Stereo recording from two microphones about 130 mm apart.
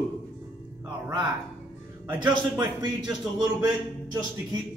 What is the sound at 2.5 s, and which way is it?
Speech, 35° right (ahead or behind).